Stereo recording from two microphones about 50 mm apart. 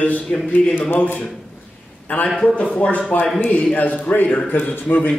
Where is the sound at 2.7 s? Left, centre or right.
Left.